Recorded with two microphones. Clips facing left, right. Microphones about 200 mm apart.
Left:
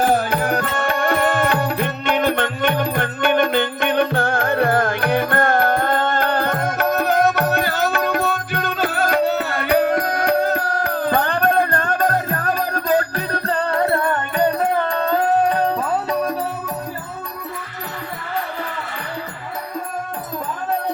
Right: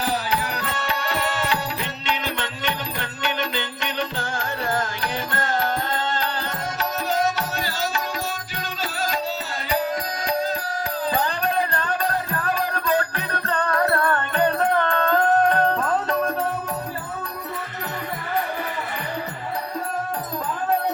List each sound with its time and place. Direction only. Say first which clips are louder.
0.0 s music: left 7 dB; 50° left (ahead or behind); by 16.3 s 10° left (ahead or behind)